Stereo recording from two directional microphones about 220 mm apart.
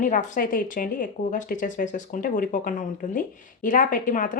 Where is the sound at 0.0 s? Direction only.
35° left (ahead or behind).